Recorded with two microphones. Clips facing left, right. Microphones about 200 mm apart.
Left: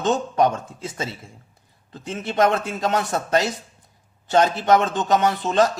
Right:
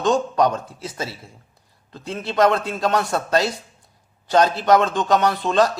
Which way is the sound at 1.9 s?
20° left (ahead or behind).